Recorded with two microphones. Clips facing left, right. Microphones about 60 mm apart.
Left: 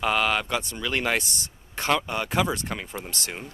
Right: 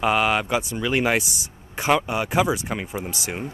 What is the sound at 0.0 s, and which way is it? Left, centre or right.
Speech, centre.